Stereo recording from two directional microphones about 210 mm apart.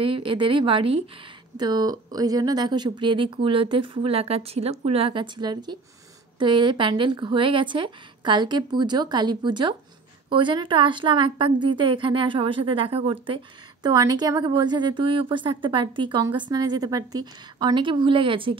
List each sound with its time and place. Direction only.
0.0 s a woman's voice: 25° right (ahead or behind)